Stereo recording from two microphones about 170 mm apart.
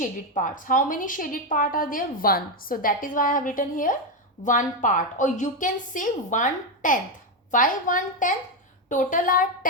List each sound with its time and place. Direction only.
0.0 s a woman's voice: 50° left (ahead or behind)